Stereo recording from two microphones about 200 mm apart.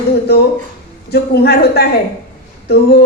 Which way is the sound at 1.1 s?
55° left (ahead or behind).